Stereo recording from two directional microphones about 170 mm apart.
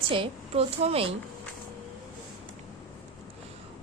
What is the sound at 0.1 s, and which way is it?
A woman's voice, 35° right (ahead or behind).